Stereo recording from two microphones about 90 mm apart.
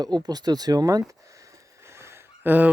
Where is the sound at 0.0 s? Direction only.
50° right (ahead or behind).